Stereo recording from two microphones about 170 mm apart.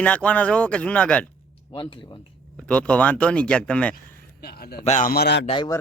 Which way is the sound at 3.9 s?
65° left (ahead or behind).